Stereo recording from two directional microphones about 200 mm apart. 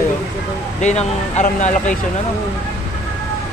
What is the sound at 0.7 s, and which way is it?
Speech, 35° left (ahead or behind).